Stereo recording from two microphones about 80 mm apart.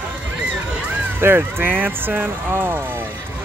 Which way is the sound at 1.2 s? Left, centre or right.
Right.